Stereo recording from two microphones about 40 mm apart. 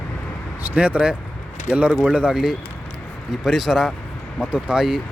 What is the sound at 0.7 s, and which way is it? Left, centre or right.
Speech, right.